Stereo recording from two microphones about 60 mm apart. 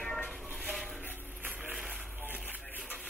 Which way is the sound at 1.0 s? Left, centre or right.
Right.